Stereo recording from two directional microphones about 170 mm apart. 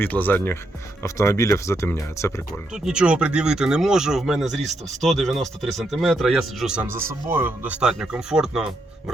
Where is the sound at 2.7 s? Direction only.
5° right (ahead or behind).